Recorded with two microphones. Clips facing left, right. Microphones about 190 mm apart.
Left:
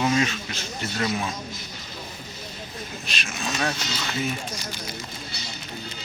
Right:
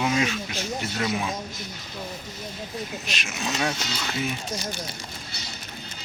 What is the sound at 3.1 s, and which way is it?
Speech, 10° right (ahead or behind).